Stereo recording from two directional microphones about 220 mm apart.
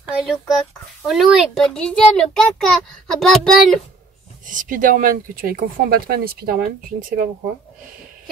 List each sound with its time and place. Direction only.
0.2 s a child's voice: centre (ahead or behind)
4.5 s speech: 35° right (ahead or behind)